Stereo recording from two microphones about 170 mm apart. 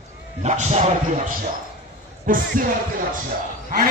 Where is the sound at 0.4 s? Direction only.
40° right (ahead or behind).